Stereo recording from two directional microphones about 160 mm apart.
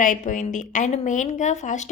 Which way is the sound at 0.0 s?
55° left (ahead or behind).